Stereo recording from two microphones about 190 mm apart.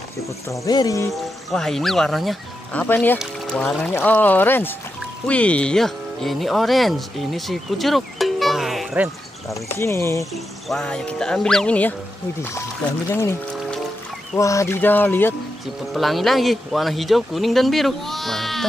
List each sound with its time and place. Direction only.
0.5 s speech: 20° left (ahead or behind)
1.1 s speech: centre (ahead or behind)
9.5 s speech: 15° left (ahead or behind)
10.7 s speech: 5° left (ahead or behind)
15.9 s speech: centre (ahead or behind)